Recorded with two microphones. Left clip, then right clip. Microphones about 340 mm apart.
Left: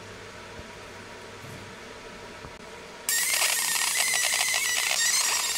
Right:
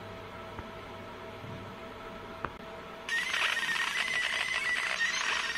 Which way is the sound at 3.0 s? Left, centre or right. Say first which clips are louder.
Left 3 dB; centre.